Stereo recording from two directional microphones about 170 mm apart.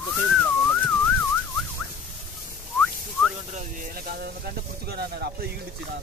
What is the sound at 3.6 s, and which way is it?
Snake, 55° right (ahead or behind).